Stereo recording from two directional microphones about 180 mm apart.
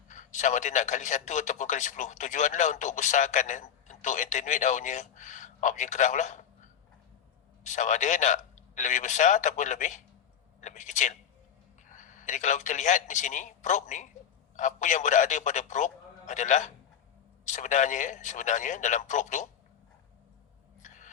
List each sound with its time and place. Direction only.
0.1 s a man's voice: 45° left (ahead or behind)
20.8 s chewing: 45° left (ahead or behind)